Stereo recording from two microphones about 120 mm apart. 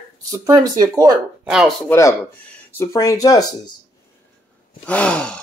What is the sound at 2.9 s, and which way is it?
Speech, 30° left (ahead or behind).